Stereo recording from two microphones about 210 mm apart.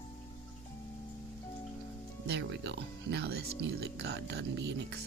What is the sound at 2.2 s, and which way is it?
Speech, 55° right (ahead or behind).